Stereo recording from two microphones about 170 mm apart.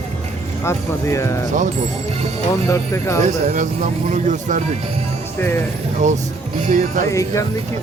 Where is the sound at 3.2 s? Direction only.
45° right (ahead or behind).